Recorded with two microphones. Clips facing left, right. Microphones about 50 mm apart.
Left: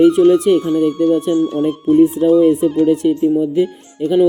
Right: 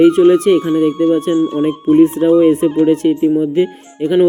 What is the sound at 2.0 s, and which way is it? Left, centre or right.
Speech, right.